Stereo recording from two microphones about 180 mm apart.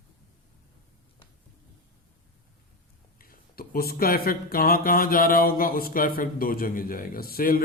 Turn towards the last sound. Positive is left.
turn(degrees=55)  # may be behind; listen again after turning